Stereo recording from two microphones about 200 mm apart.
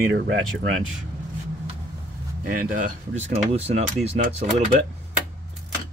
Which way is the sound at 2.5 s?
45° right (ahead or behind).